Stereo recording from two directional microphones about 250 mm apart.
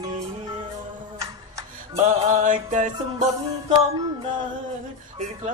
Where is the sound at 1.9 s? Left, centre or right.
Right.